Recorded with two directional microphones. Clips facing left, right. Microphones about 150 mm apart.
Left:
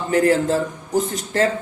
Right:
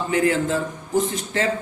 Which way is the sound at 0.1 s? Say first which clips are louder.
Left 4 dB; 40° left (ahead or behind).